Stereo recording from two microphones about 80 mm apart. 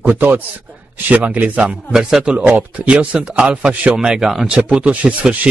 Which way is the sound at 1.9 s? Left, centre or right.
Centre.